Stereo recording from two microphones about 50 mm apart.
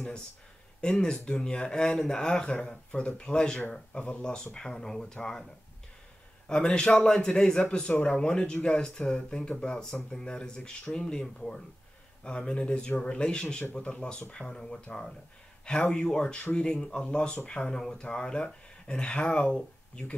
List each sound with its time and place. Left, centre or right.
0.7 s speech: centre
6.5 s speech: centre